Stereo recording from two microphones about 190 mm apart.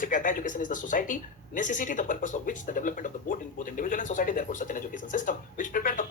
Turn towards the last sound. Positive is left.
turn(degrees=45)  # may be behind; listen again after turning